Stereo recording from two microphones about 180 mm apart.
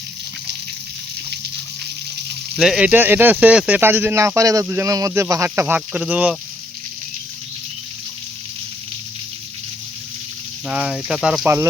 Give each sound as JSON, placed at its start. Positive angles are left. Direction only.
{"t": 2.6, "sound": "speech", "side_deg": -5}
{"t": 10.7, "sound": "speech", "side_deg": -5}